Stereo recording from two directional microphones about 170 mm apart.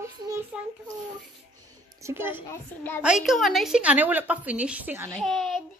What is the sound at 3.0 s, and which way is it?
A woman's voice, centre (ahead or behind).